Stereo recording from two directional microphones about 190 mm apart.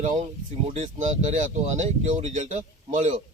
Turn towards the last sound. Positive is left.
turn(degrees=-40)  # may be behind; listen again after turning